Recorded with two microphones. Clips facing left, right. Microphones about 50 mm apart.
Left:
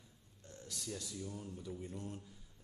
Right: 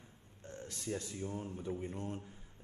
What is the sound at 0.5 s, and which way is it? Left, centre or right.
Speech, right.